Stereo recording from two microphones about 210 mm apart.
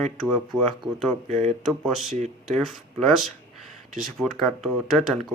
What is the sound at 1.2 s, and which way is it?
Speech, 30° right (ahead or behind).